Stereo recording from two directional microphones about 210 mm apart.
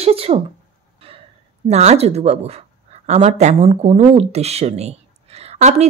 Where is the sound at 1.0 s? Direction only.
25° right (ahead or behind).